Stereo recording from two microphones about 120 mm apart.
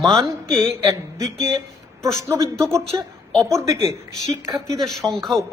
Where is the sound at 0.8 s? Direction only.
30° right (ahead or behind).